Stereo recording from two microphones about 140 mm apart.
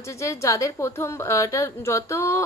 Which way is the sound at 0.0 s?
20° left (ahead or behind).